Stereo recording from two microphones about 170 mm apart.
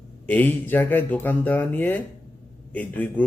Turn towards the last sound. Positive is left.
turn(degrees=10)  # may be behind; listen again after turning